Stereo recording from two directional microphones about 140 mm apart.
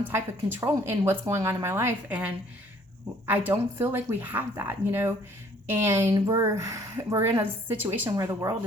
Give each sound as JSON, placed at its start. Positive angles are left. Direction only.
{"t": 0.1, "sound": "speech", "side_deg": -15}
{"t": 3.3, "sound": "speech", "side_deg": -15}
{"t": 6.1, "sound": "speech", "side_deg": -30}
{"t": 6.5, "sound": "speech", "side_deg": -20}